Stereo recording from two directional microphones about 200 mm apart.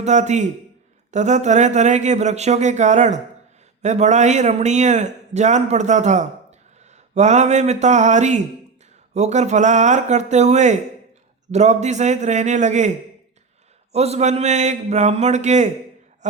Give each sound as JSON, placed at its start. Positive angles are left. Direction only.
{"t": 0.0, "sound": "a man's voice", "side_deg": -35}
{"t": 13.9, "sound": "a man's voice", "side_deg": -30}